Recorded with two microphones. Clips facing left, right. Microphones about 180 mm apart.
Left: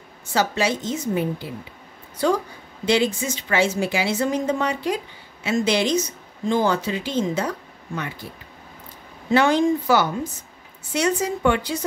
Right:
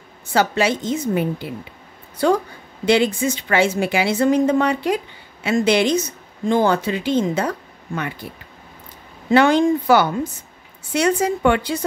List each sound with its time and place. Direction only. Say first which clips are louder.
0.3 s a woman's voice: right 3 dB; 60° right (ahead or behind)
2.9 s a woman's voice: right 4 dB; 60° right (ahead or behind)
9.3 s a woman's voice: right 3 dB; 60° right (ahead or behind)